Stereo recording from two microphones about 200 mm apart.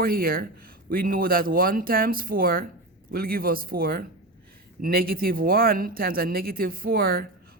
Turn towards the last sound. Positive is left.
turn(degrees=-50)  # may be behind; listen again after turning